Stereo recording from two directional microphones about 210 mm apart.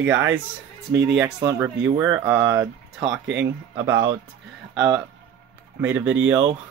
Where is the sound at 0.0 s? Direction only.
10° right (ahead or behind).